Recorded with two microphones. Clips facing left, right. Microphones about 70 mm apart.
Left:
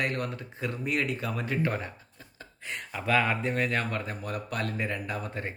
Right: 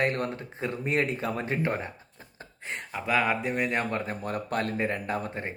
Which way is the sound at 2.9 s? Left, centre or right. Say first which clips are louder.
Even; centre.